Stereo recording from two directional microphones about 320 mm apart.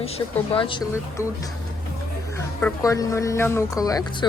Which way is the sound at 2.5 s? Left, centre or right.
Centre.